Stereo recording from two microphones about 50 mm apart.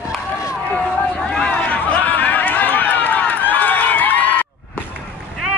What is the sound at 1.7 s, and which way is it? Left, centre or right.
Run, left.